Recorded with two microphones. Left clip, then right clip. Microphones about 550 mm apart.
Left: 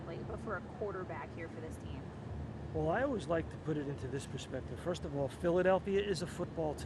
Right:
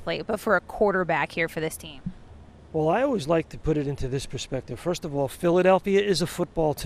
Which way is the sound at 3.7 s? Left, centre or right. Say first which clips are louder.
Right 14 dB; right.